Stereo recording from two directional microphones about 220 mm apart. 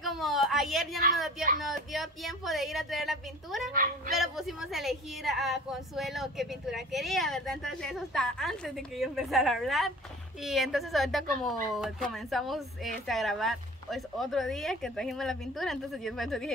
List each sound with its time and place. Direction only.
0.0 s a sound: centre (ahead or behind)
1.6 s a woman's voice: centre (ahead or behind)
3.7 s speech: 40° right (ahead or behind)
4.2 s a woman's voice: centre (ahead or behind)